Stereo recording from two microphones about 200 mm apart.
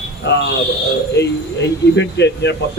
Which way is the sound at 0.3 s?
60° left (ahead or behind).